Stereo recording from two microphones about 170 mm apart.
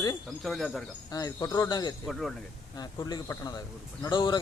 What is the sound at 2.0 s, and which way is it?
Speech, centre (ahead or behind).